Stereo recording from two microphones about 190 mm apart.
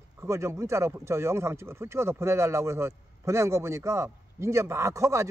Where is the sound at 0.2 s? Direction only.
15° right (ahead or behind).